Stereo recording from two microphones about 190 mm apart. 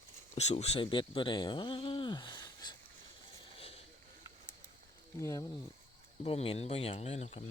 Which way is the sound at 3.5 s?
30° left (ahead or behind).